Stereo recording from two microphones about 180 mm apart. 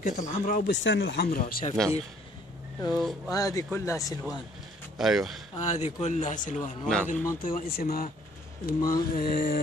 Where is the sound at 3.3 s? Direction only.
20° left (ahead or behind).